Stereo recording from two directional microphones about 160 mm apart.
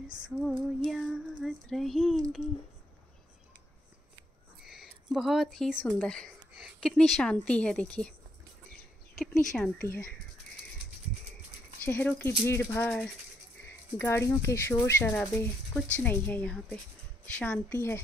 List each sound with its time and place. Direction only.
0.8 s a woman's voice: centre (ahead or behind)
4.6 s a woman's voice: centre (ahead or behind)
9.1 s speech: centre (ahead or behind)
11.8 s speech: 10° left (ahead or behind)